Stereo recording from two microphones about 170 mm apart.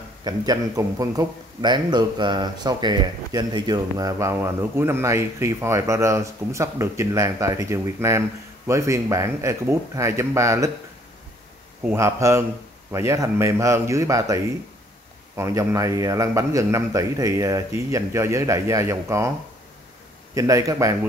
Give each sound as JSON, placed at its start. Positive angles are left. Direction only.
{"t": 0.2, "sound": "a man's voice", "side_deg": -20}
{"t": 11.8, "sound": "a man's voice", "side_deg": -15}
{"t": 20.3, "sound": "a man's voice", "side_deg": -20}